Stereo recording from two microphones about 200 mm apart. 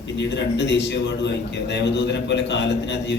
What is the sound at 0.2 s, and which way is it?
A man's voice, 60° left (ahead or behind).